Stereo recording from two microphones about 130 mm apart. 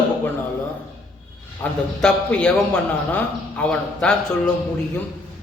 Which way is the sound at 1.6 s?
20° left (ahead or behind).